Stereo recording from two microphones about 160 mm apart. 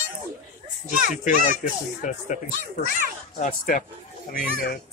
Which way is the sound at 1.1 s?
50° left (ahead or behind).